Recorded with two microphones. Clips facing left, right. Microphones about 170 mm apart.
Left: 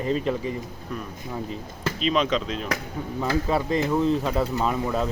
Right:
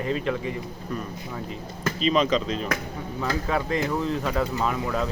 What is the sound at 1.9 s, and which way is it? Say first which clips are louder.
Speech: right 1 dB; centre (ahead or behind).